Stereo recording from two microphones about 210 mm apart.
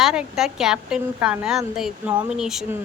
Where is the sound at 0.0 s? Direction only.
Centre (ahead or behind).